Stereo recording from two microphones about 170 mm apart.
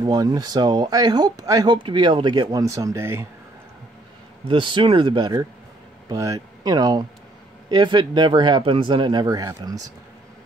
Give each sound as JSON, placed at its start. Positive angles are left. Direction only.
{"t": 0.0, "sound": "speech", "side_deg": -25}
{"t": 4.5, "sound": "speech", "side_deg": -30}